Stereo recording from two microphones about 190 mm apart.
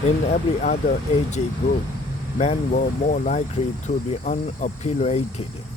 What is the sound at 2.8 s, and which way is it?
Speech, 40° left (ahead or behind).